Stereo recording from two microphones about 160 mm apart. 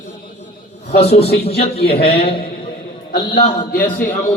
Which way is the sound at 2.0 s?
75° left (ahead or behind).